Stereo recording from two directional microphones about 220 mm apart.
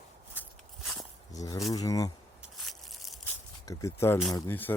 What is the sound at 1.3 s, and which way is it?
Speech, 15° left (ahead or behind).